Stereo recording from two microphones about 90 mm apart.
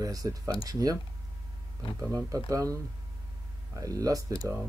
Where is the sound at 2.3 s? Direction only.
40° right (ahead or behind).